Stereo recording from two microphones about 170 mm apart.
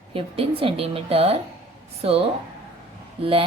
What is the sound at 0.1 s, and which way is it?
A woman's voice, 35° right (ahead or behind).